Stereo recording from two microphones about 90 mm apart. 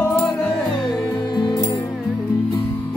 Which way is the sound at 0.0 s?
15° left (ahead or behind).